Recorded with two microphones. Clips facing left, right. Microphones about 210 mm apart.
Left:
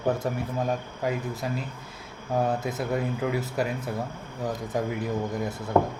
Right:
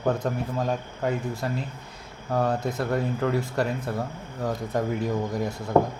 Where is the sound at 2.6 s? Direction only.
5° left (ahead or behind).